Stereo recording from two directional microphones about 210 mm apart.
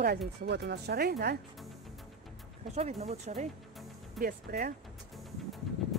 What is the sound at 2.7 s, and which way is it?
Speech, 30° right (ahead or behind).